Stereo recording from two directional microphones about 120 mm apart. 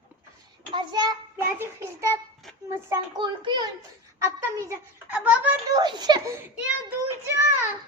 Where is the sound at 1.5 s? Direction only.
20° right (ahead or behind).